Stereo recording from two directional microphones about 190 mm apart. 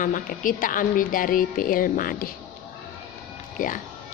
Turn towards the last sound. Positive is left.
turn(degrees=45)  # may be behind; listen again after turning